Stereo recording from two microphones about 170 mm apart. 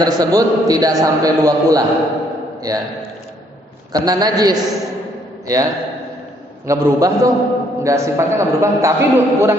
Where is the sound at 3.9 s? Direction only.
25° right (ahead or behind).